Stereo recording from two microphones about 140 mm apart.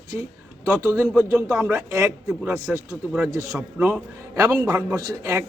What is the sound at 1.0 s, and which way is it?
A man's voice, 10° right (ahead or behind).